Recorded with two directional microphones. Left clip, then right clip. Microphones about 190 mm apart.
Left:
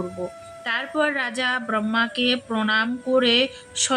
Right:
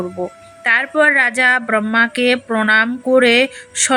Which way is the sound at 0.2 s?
20° right (ahead or behind).